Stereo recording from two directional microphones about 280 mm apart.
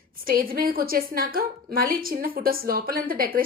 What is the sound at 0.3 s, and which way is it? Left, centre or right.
A woman's voice, right.